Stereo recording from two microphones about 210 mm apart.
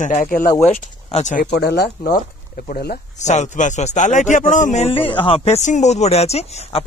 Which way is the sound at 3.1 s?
35° left (ahead or behind).